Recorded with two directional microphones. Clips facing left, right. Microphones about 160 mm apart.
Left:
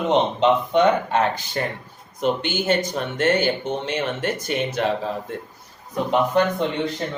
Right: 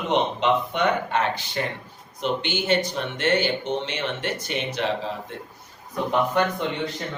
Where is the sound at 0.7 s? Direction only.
40° left (ahead or behind).